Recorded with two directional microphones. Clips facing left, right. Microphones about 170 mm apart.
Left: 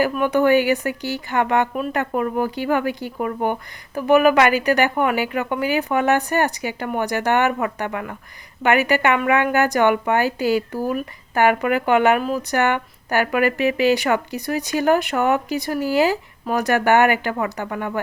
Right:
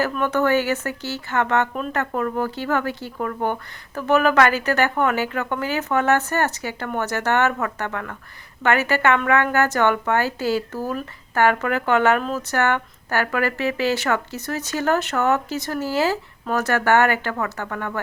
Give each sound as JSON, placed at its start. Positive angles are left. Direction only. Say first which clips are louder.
{"t": 0.0, "sound": "a woman's voice", "louder": "left 3 dB", "side_deg": 10}